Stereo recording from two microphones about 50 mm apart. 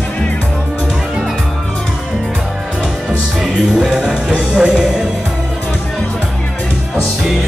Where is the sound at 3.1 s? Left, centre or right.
Centre.